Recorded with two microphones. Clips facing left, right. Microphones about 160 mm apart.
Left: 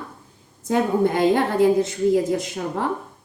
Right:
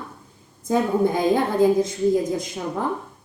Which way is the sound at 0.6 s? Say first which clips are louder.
Even; 70° left (ahead or behind).